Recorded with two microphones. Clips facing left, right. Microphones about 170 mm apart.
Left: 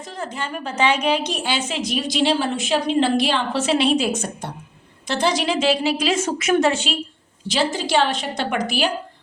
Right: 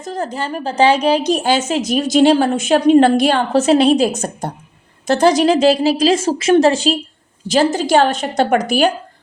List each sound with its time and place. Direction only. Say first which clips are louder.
0.0 s a woman's voice: right 7 dB; 40° right (ahead or behind)